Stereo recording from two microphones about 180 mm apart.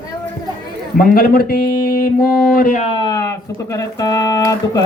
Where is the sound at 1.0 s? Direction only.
55° left (ahead or behind).